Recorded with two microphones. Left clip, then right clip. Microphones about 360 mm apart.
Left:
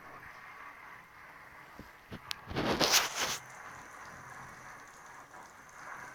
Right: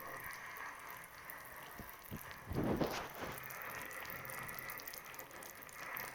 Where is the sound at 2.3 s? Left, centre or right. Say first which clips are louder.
Left 7 dB; left.